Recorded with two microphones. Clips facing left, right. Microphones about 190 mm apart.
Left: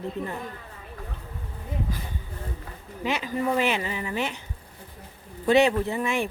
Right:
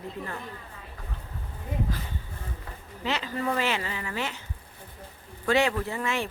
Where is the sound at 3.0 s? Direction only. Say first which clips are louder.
Left 3 dB; 15° left (ahead or behind).